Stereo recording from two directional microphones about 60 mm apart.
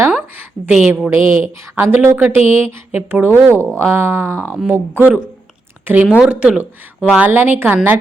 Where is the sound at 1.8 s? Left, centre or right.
Right.